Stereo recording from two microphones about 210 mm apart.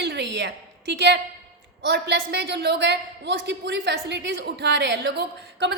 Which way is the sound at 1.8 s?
55° right (ahead or behind).